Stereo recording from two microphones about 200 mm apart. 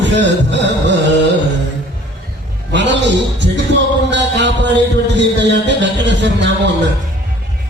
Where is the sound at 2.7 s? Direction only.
65° right (ahead or behind).